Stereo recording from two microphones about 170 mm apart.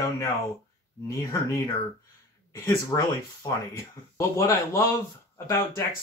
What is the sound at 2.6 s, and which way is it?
Speech, 20° left (ahead or behind).